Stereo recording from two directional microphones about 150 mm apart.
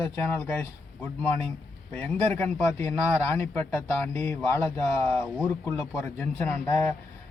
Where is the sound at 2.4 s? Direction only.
15° left (ahead or behind).